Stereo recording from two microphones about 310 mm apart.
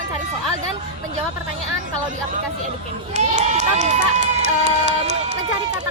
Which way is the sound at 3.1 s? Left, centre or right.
Right.